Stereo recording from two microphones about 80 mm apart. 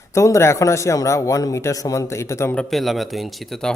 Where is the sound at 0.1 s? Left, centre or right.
Left.